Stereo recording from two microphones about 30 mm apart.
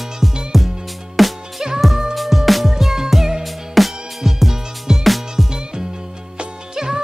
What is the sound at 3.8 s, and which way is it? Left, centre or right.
Music, centre.